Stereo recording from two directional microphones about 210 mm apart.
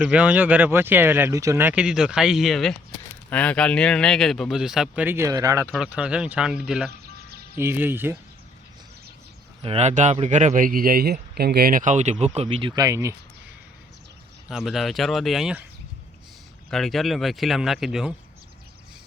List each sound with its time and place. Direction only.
0.0 s speech: 5° right (ahead or behind)
5.7 s speech: 5° right (ahead or behind)
9.6 s speech: 30° right (ahead or behind); by 13.1 s 15° right (ahead or behind)
14.4 s speech: centre (ahead or behind)
16.6 s speech: centre (ahead or behind)